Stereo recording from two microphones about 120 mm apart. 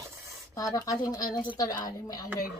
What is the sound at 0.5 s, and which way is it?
Speech, 30° left (ahead or behind).